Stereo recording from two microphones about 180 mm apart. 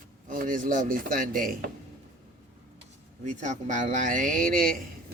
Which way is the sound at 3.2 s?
45° right (ahead or behind).